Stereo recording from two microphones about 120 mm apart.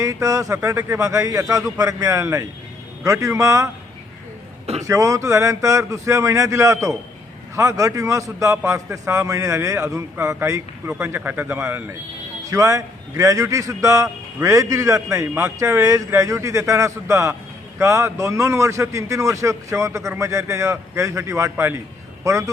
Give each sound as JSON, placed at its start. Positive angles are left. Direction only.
{"t": 0.0, "sound": "a man's voice", "side_deg": -25}
{"t": 4.6, "sound": "a sound", "side_deg": -60}
{"t": 4.9, "sound": "a man's voice", "side_deg": -25}